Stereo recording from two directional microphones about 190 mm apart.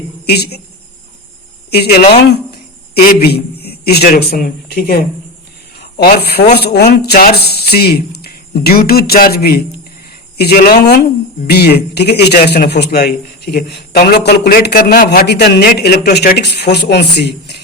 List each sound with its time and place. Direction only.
0.3 s speech: 55° left (ahead or behind)
1.7 s a man's voice: 55° left (ahead or behind)
5.7 s a sound: 55° left (ahead or behind)
6.1 s speech: 55° left (ahead or behind)